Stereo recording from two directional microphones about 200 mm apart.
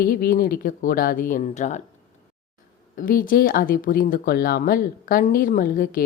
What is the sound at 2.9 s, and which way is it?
A woman's voice, 45° left (ahead or behind).